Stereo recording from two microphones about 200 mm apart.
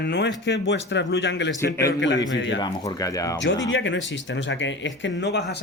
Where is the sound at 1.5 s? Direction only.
15° left (ahead or behind).